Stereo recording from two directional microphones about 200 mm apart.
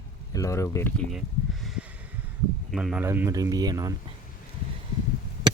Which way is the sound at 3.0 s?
15° right (ahead or behind).